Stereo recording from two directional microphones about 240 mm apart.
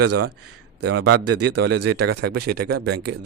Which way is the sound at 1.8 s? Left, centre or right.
Right.